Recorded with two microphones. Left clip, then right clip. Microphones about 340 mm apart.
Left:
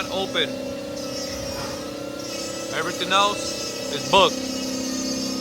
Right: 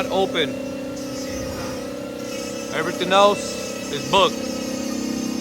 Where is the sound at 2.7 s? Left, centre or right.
Centre.